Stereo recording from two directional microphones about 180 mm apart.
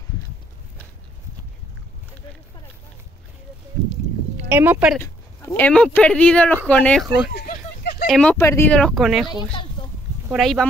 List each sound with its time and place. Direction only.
4.5 s speech: 10° right (ahead or behind)
5.0 s speech: 15° left (ahead or behind)
7.3 s a sound: 65° left (ahead or behind)
8.1 s speech: 5° left (ahead or behind)
9.3 s speech: 25° left (ahead or behind)
10.3 s speech: centre (ahead or behind)